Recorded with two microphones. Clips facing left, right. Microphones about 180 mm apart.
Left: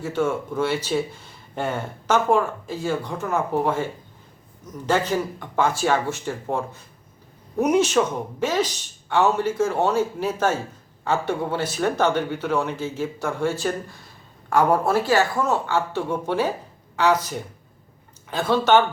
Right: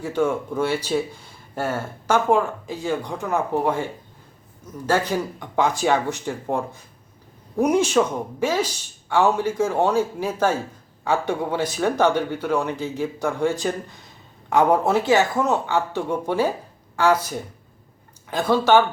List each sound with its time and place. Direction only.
0.0 s speech: 15° right (ahead or behind)